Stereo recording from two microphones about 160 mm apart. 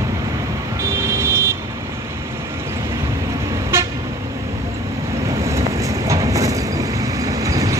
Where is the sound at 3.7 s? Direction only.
15° right (ahead or behind).